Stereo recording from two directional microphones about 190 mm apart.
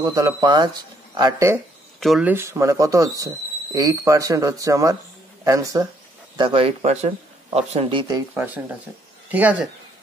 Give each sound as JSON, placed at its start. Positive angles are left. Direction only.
{"t": 0.0, "sound": "speech", "side_deg": -20}
{"t": 2.0, "sound": "speech", "side_deg": 0}
{"t": 6.3, "sound": "speech", "side_deg": -25}
{"t": 9.3, "sound": "speech", "side_deg": -5}